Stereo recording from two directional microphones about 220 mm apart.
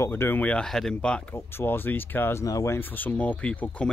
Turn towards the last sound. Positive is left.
turn(degrees=5)  # may be behind; listen again after turning